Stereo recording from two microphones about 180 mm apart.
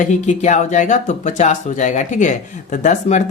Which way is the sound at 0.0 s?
40° left (ahead or behind).